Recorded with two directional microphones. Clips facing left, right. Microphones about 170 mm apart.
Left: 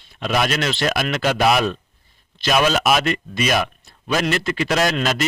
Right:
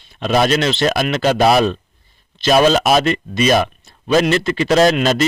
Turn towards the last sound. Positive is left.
turn(degrees=-30)  # may be behind; listen again after turning